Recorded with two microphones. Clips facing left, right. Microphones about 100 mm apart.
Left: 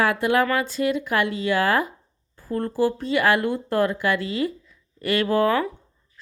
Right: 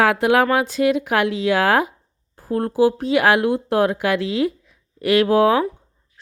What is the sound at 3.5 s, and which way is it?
Speech, 60° right (ahead or behind).